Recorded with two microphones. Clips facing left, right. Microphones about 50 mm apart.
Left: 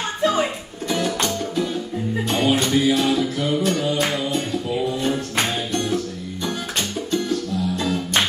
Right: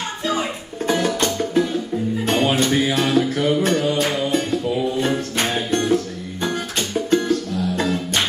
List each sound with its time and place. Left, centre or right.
0.8 s music: right
5.7 s music: right
7.1 s music: right